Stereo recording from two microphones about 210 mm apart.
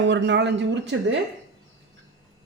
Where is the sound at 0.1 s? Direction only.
55° right (ahead or behind).